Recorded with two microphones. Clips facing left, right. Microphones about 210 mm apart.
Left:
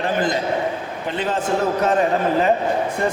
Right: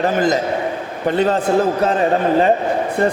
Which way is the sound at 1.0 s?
40° right (ahead or behind).